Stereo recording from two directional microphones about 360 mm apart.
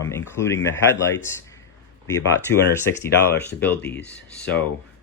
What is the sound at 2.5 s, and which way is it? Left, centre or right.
Speech, left.